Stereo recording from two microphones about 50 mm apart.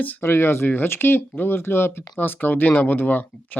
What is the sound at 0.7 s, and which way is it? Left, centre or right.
Speech, left.